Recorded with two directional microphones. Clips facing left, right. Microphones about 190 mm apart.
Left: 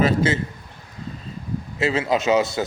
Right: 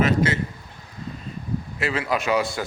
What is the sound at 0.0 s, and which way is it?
Speech, 25° left (ahead or behind).